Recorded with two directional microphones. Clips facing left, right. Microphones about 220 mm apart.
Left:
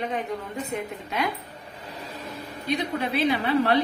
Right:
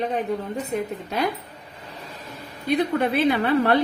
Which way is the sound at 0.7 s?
40° right (ahead or behind).